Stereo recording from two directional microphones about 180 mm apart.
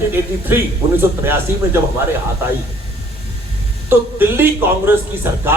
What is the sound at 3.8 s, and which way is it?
Speech, 10° right (ahead or behind).